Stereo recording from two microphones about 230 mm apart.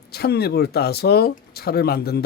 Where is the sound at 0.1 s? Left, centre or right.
Left.